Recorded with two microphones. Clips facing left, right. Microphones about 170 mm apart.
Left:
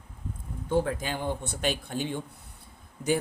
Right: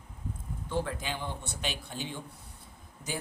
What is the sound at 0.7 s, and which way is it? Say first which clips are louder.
A man's voice: left 6 dB; 50° left (ahead or behind).